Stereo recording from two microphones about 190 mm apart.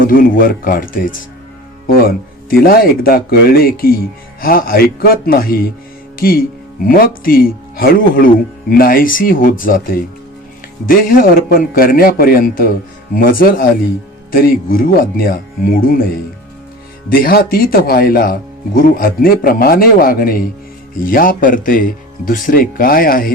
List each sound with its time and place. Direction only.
0.0 s speech: 50° left (ahead or behind)
17.1 s speech: 50° left (ahead or behind)